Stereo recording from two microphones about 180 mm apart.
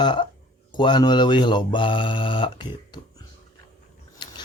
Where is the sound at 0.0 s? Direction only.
25° left (ahead or behind).